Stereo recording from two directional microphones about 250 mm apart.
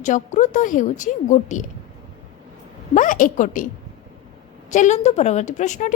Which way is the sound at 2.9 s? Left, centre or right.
Left.